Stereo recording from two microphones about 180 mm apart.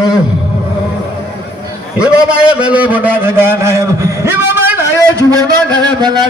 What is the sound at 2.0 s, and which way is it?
A man's voice, 5° right (ahead or behind).